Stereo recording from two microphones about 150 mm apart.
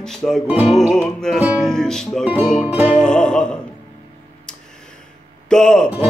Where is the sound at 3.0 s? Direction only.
5° left (ahead or behind).